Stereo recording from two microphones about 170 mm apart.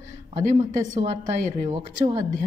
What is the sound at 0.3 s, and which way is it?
Speech, 45° right (ahead or behind).